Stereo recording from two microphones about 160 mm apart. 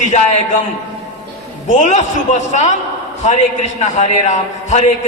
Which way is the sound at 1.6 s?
50° left (ahead or behind).